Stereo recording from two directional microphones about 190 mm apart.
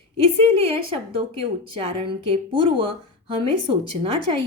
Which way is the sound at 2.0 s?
25° right (ahead or behind).